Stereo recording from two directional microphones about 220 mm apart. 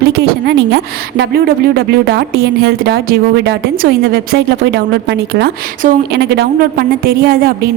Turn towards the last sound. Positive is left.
turn(degrees=-40)  # may be behind; listen again after turning